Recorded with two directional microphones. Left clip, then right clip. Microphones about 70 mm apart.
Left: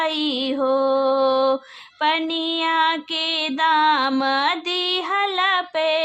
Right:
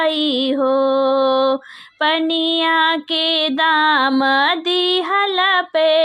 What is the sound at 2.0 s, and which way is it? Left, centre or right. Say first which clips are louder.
Music: right 4 dB; right.